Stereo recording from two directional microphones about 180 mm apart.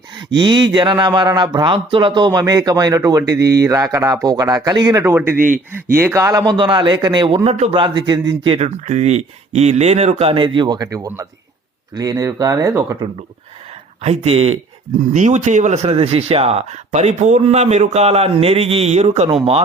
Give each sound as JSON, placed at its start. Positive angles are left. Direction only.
{"t": 0.3, "sound": "speech", "side_deg": -25}
{"t": 14.0, "sound": "speech", "side_deg": -35}